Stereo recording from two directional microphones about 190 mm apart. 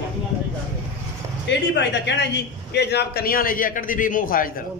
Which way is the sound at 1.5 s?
65° left (ahead or behind).